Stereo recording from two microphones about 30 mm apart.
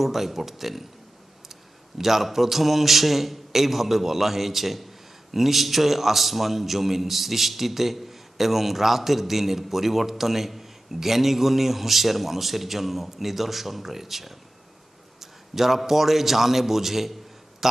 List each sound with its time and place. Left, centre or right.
0.0 s a man's voice: centre
2.0 s a man's voice: centre